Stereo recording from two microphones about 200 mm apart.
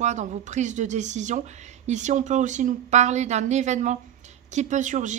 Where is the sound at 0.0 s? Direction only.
35° right (ahead or behind).